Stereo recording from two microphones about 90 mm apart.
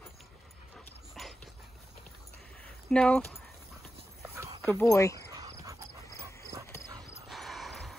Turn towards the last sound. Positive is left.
turn(degrees=0)  # may be behind; listen again after turning